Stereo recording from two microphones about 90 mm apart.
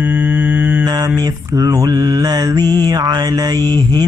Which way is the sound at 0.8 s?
45° right (ahead or behind).